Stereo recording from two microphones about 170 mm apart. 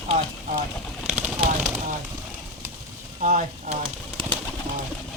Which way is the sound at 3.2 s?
45° right (ahead or behind).